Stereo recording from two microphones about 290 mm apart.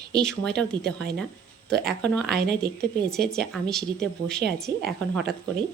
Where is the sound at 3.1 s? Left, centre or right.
Centre.